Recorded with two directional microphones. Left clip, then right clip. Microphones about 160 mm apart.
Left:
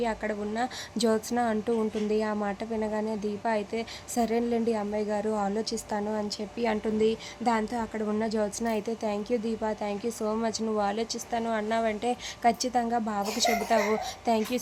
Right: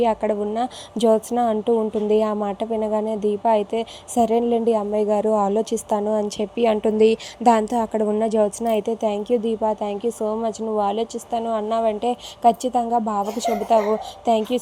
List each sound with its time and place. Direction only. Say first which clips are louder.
0.0 s a woman's voice: right 10 dB; 30° right (ahead or behind)